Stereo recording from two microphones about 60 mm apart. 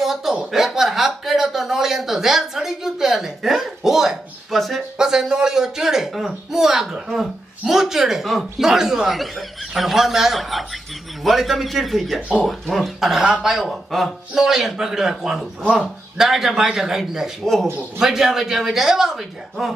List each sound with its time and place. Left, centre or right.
0.0 s speech: centre
4.9 s a man's voice: centre
17.4 s a man's voice: centre
18.0 s speech: centre